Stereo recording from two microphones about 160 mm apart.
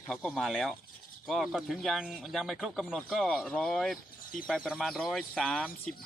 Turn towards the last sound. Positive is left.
turn(degrees=5)  # may be behind; listen again after turning